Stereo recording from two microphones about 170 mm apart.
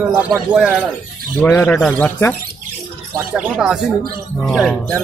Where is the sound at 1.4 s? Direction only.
10° left (ahead or behind).